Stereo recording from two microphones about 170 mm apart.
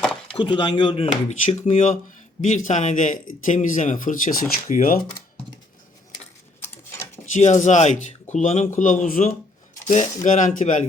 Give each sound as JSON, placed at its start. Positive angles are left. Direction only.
{"t": 0.0, "sound": "a sound", "side_deg": 5}
{"t": 0.3, "sound": "speech", "side_deg": 30}
{"t": 7.3, "sound": "speech", "side_deg": 45}